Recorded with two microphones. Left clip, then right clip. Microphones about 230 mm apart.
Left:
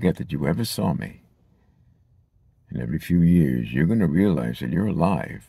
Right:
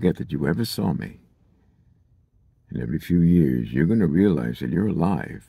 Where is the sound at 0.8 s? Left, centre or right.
Left.